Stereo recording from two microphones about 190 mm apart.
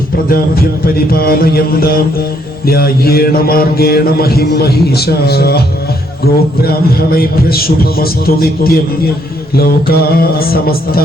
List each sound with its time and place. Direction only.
0.3 s mantra: 50° left (ahead or behind)